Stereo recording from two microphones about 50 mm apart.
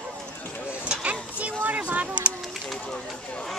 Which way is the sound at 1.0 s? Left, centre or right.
Right.